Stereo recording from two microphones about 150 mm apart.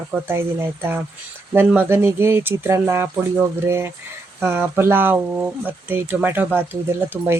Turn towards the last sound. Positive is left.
turn(degrees=-5)  # may be behind; listen again after turning